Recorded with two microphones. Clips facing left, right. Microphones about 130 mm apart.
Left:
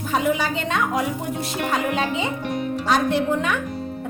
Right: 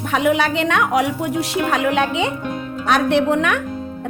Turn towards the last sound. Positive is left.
turn(degrees=-70)  # may be behind; listen again after turning